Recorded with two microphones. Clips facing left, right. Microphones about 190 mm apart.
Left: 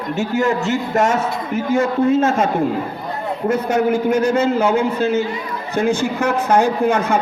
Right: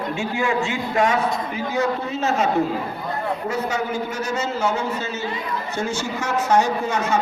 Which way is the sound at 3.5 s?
55° left (ahead or behind).